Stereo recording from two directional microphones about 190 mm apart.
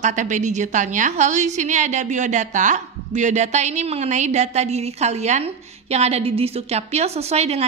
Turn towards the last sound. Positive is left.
turn(degrees=-35)  # may be behind; listen again after turning